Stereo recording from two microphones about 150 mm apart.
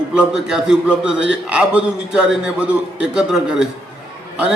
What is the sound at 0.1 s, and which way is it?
A man's voice, 5° right (ahead or behind).